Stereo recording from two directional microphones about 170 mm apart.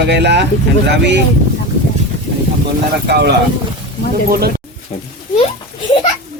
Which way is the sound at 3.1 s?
80° right.